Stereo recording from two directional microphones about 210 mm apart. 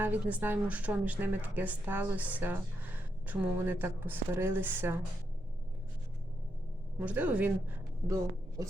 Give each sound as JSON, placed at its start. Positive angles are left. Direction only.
{"t": 0.0, "sound": "speech", "side_deg": -10}
{"t": 7.0, "sound": "a woman's voice", "side_deg": -5}